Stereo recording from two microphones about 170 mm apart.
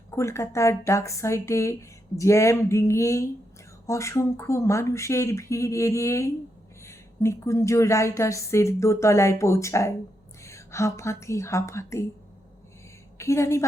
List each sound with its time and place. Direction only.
0.1 s a woman's voice: 15° left (ahead or behind)
13.1 s a woman's voice: 15° left (ahead or behind)